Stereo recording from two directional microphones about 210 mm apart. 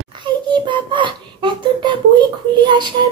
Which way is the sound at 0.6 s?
20° right (ahead or behind).